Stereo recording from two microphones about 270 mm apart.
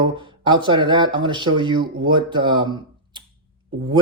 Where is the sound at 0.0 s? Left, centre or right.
Centre.